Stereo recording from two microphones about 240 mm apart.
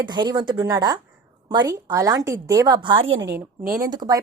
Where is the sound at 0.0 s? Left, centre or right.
Centre.